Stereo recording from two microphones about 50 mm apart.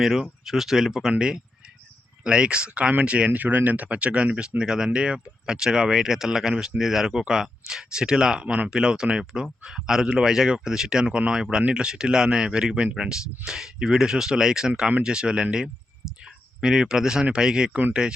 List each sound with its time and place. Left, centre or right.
0.0 s speech: centre
2.2 s speech: centre